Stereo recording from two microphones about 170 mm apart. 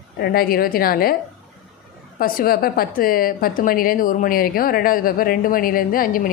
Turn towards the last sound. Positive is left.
turn(degrees=55)  # may be behind; listen again after turning